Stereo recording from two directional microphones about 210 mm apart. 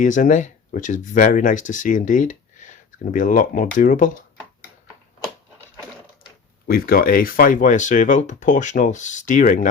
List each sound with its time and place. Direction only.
0.0 s speech: 40° left (ahead or behind)
6.7 s speech: 45° left (ahead or behind)